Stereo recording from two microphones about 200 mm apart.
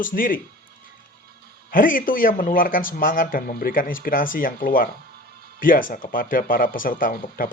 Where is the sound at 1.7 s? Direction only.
45° left (ahead or behind).